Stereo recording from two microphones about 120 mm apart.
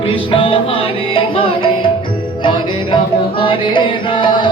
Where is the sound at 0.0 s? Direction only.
45° left (ahead or behind).